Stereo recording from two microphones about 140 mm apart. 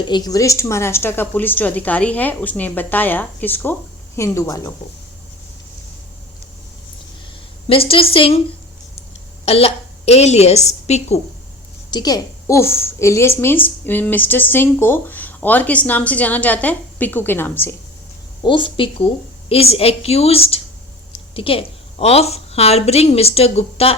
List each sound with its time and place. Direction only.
0.0 s a woman's voice: 30° left (ahead or behind)
7.7 s a woman's voice: 40° left (ahead or behind)
9.5 s a woman's voice: 45° left (ahead or behind)
11.9 s a woman's voice: 30° left (ahead or behind)
18.4 s a woman's voice: 35° left (ahead or behind)